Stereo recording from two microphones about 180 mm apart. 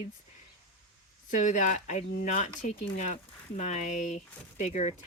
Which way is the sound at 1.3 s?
45° left (ahead or behind).